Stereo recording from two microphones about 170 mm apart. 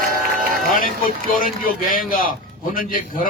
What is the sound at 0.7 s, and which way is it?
A man's voice, 55° left (ahead or behind).